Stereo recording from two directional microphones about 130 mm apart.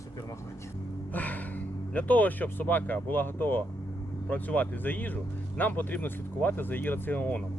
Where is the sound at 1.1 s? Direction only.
10° left (ahead or behind).